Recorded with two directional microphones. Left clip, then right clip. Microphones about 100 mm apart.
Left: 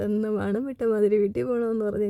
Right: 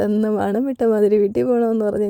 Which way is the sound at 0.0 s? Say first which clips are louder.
Right 7 dB; 45° right (ahead or behind).